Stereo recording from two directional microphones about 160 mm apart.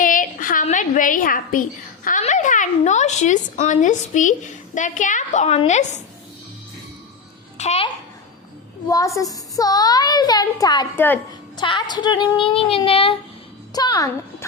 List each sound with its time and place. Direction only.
0.0 s a sound: 55° left (ahead or behind)
2.0 s a woman's voice: 50° left (ahead or behind)
7.6 s speech: 40° left (ahead or behind)
8.9 s a child's voice: 20° left (ahead or behind)
10.9 s a woman's voice: 15° left (ahead or behind)
11.5 s speech: 30° left (ahead or behind)
13.7 s a child's voice: 25° left (ahead or behind)